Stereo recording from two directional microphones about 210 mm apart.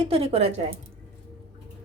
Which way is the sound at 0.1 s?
30° right (ahead or behind).